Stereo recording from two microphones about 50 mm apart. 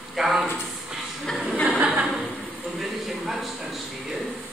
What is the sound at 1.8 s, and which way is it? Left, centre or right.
Chuckle, centre.